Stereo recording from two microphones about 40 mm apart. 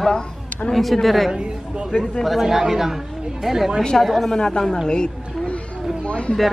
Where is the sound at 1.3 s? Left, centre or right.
Right.